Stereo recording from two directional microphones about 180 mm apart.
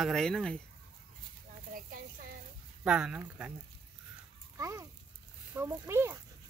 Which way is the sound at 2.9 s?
5° right (ahead or behind).